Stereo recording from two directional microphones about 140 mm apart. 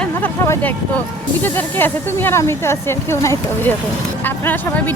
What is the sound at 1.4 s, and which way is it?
Speech, 15° left (ahead or behind).